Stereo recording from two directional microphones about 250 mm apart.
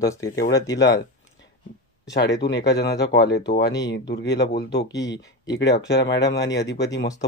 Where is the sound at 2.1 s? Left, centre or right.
Left.